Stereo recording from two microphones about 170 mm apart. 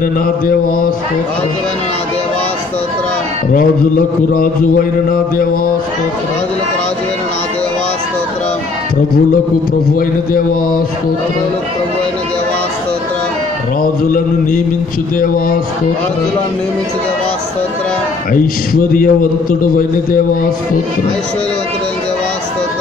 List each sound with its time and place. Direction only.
4.3 s a man's voice: 55° left (ahead or behind)
9.9 s a man's voice: 55° left (ahead or behind)
15.1 s a man's voice: 55° left (ahead or behind)
18.3 s a man's voice: 55° left (ahead or behind)